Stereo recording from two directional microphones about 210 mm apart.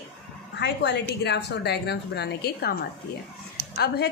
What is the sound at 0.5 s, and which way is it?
A woman's voice, 55° left (ahead or behind).